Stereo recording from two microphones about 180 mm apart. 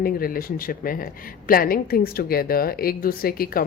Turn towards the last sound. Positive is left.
turn(degrees=55)  # may be behind; listen again after turning